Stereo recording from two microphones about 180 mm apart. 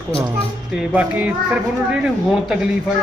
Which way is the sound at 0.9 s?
5° right (ahead or behind).